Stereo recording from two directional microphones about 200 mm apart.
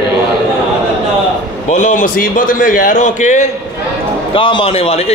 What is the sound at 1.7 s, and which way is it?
A man's voice, 40° left (ahead or behind).